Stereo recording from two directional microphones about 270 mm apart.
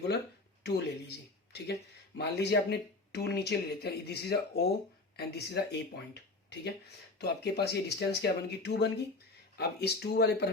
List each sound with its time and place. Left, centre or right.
0.6 s speech: left